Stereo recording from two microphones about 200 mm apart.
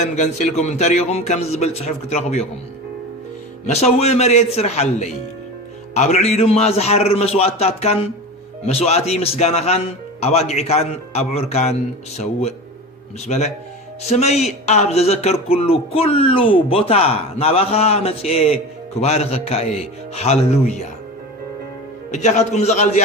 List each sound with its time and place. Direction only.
0.0 s speech: 35° left (ahead or behind)
3.7 s speech: 35° left (ahead or behind)
22.1 s speech: 35° left (ahead or behind)